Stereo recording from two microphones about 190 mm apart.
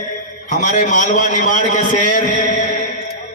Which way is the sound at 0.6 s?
40° left (ahead or behind).